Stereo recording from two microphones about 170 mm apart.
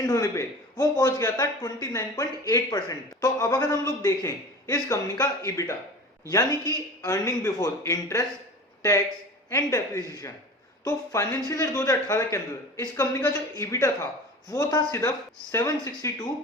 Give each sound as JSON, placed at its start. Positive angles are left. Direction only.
{"t": 0.0, "sound": "a man's voice", "side_deg": 20}
{"t": 6.3, "sound": "a man's voice", "side_deg": 20}
{"t": 9.5, "sound": "a man's voice", "side_deg": 20}